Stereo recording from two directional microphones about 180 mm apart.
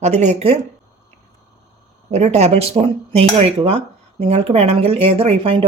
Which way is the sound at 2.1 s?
40° right (ahead or behind).